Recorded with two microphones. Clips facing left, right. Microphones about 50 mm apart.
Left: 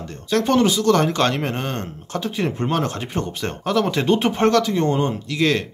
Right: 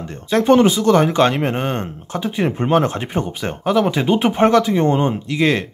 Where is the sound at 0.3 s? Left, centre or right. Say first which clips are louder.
Right 5 dB; right.